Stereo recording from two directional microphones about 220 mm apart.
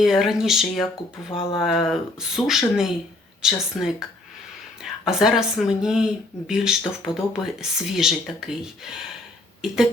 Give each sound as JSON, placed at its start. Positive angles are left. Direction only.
{"t": 0.0, "sound": "speech", "side_deg": 0}
{"t": 1.3, "sound": "speech", "side_deg": 25}
{"t": 1.5, "sound": "speech", "side_deg": 0}